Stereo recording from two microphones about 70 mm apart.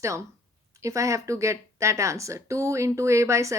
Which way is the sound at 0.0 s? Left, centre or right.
Right.